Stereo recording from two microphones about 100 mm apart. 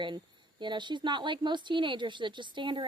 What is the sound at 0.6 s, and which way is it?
Speech, 50° right (ahead or behind).